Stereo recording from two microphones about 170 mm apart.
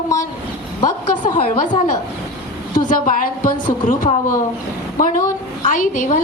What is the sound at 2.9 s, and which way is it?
A woman's voice, 55° left (ahead or behind).